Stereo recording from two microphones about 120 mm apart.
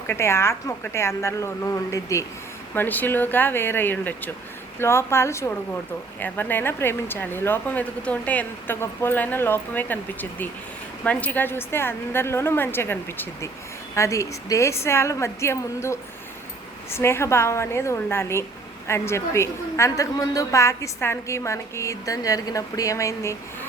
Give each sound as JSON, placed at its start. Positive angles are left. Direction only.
{"t": 0.1, "sound": "a woman's voice", "side_deg": 20}
{"t": 2.7, "sound": "a woman's voice", "side_deg": 15}